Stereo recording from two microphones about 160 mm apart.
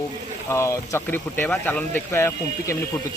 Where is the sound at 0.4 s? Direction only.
20° left (ahead or behind).